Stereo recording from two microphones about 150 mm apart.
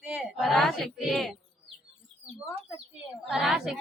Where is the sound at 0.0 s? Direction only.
5° right (ahead or behind).